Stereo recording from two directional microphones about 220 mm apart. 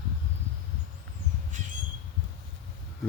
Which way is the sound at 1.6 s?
35° right (ahead or behind).